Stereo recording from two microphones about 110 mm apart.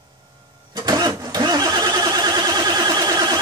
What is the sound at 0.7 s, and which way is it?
Vehicle, 40° right (ahead or behind).